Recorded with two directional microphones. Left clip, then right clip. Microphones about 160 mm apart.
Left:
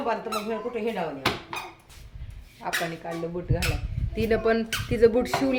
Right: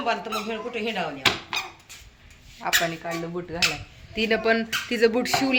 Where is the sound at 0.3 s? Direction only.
35° left (ahead or behind).